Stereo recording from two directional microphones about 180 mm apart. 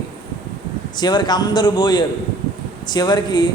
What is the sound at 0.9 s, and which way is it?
A man's voice, 25° left (ahead or behind).